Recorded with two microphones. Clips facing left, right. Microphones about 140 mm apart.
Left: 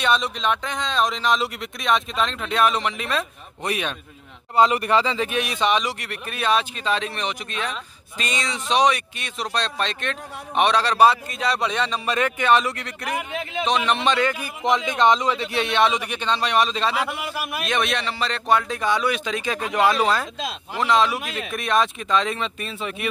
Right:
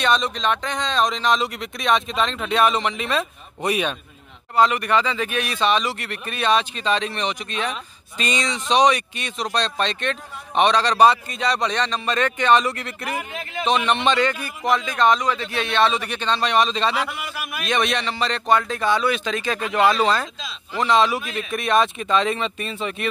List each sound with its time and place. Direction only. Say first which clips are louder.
0.0 s speech: right 1 dB; 10° left (ahead or behind)
4.6 s speech: even; 25° left (ahead or behind); by 13.2 s centre (ahead or behind)
13.3 s a man's voice: left 3 dB; 20° left (ahead or behind)
13.7 s speech: right 2 dB; centre (ahead or behind)
14.6 s speech: even; 20° left (ahead or behind)
17.1 s a man's voice: left 3 dB; 25° left (ahead or behind)
17.6 s speech: right 3 dB; 5° left (ahead or behind)